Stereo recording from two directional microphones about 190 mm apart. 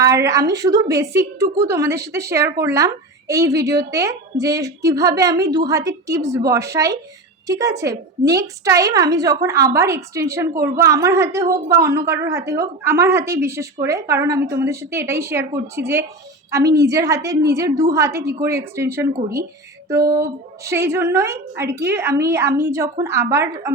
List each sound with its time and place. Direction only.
0.0 s a woman's voice: 15° right (ahead or behind)
20.1 s a woman's voice: 15° right (ahead or behind)